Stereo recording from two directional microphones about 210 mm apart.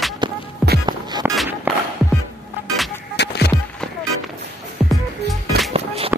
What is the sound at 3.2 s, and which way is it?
Music, 55° left (ahead or behind).